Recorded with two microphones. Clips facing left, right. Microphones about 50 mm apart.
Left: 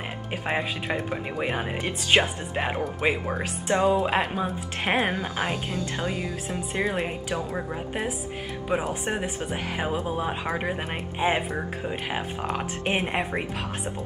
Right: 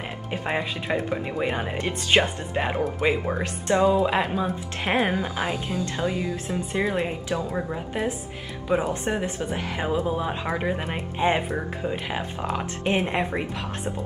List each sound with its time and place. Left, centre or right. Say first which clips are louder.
0.3 s speech: right 1 dB; centre
3.7 s speech: right 2 dB; left
4.0 s speech: right 2 dB; centre
8.7 s speech: right 3 dB; left
9.1 s speech: right 2 dB; centre